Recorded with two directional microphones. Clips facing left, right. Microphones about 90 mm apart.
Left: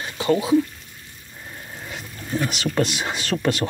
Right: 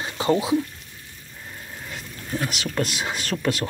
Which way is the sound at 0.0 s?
25° right (ahead or behind).